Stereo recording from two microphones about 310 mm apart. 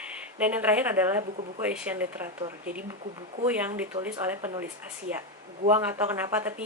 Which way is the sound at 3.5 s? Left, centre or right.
Centre.